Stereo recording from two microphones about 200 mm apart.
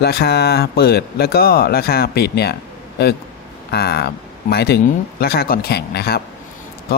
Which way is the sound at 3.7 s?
50° left (ahead or behind).